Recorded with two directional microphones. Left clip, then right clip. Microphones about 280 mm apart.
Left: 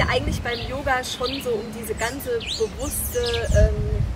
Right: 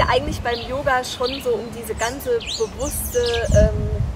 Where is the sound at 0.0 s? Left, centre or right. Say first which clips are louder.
Right 4 dB; centre.